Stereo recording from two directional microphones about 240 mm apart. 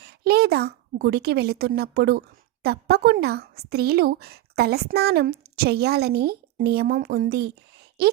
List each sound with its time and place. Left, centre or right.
0.0 s a woman's voice: right